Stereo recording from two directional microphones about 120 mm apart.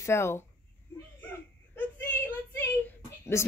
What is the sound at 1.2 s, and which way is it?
Whimper, 15° left (ahead or behind).